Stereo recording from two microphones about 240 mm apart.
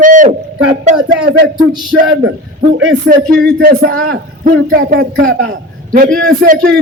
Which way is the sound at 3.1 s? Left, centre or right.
Right.